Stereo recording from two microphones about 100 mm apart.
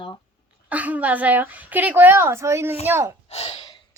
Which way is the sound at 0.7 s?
15° right (ahead or behind).